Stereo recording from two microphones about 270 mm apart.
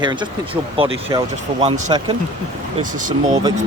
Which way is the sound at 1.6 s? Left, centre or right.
Centre.